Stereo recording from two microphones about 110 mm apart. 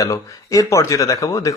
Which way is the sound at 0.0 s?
30° left (ahead or behind).